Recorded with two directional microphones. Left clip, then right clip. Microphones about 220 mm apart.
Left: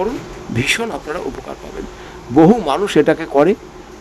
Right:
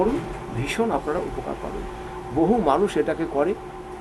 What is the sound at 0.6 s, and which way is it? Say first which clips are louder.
Speech: left 6 dB; 55° left (ahead or behind).